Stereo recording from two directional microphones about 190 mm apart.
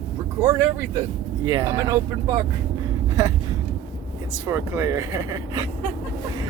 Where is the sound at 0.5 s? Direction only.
15° right (ahead or behind).